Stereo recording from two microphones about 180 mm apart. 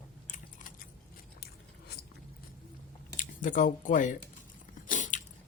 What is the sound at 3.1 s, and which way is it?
Speech, 45° left (ahead or behind).